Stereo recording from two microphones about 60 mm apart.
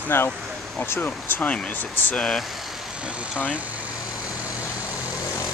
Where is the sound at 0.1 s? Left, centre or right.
Left.